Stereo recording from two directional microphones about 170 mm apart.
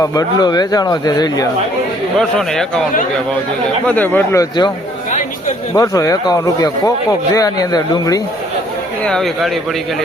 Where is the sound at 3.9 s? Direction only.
10° left (ahead or behind).